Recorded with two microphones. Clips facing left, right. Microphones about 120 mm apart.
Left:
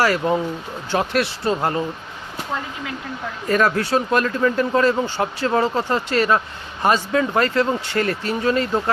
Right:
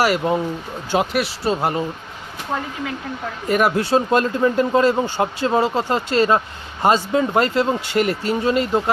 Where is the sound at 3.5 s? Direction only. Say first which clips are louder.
Right 1 dB; 15° right (ahead or behind).